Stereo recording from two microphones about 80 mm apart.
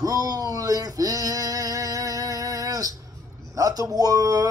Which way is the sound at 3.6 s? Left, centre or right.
Right.